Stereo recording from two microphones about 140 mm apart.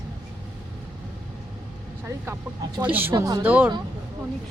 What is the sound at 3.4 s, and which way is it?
Speech, 10° right (ahead or behind).